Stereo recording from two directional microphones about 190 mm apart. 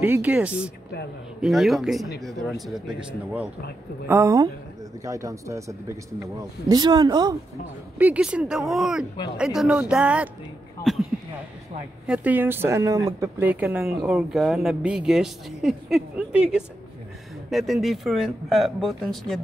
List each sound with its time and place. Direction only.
0.0 s speech: 10° right (ahead or behind)
4.1 s speech: 15° right (ahead or behind)
8.0 s speech: 5° right (ahead or behind)
12.1 s speech: 10° right (ahead or behind)